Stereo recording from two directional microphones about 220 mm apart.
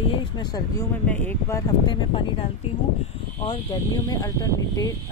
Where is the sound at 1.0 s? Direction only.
10° left (ahead or behind).